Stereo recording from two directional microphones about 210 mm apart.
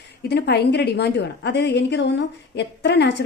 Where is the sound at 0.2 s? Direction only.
50° left (ahead or behind).